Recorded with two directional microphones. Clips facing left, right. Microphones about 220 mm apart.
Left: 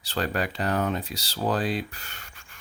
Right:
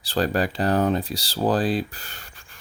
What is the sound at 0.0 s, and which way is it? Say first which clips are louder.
Speech: right 5 dB; 35° right (ahead or behind).